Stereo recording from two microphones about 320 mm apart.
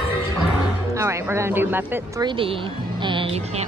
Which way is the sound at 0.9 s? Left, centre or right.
Centre.